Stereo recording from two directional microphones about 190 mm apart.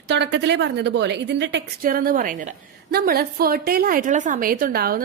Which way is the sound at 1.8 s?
50° right (ahead or behind).